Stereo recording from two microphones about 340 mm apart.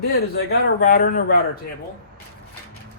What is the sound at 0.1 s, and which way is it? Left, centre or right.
Speech, left.